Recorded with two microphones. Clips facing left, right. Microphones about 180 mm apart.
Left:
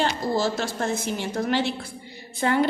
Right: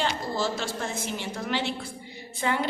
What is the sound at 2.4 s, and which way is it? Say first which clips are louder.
Speech: left 4 dB; 45° left (ahead or behind).